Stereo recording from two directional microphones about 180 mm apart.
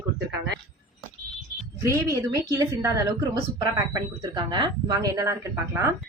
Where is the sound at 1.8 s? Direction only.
15° right (ahead or behind).